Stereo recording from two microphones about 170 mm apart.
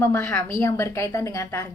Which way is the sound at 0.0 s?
15° left (ahead or behind).